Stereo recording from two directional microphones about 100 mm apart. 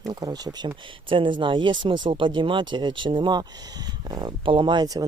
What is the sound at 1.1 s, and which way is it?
Speech, 55° right (ahead or behind).